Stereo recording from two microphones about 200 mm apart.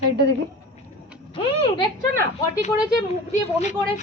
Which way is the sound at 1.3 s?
25° left (ahead or behind).